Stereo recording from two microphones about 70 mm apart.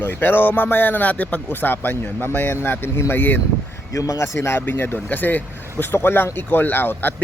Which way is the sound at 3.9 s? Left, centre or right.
Left.